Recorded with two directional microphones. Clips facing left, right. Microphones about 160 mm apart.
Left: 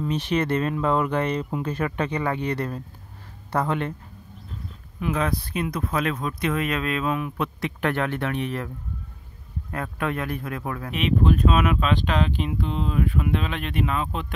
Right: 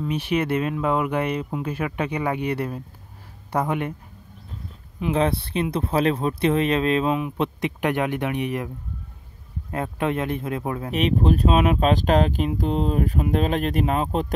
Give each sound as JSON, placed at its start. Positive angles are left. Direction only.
{"t": 0.0, "sound": "speech", "side_deg": -10}
{"t": 5.0, "sound": "speech", "side_deg": -30}
{"t": 10.9, "sound": "speech", "side_deg": -40}